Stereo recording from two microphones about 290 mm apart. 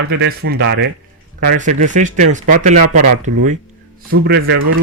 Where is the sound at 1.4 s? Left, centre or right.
Right.